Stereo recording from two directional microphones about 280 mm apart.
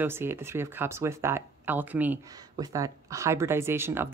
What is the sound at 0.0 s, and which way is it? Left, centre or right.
Speech, centre.